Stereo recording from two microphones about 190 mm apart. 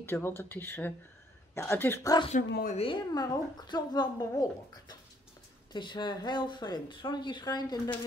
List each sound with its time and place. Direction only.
0.0 s speech: 10° left (ahead or behind)
2.7 s speech: 30° left (ahead or behind)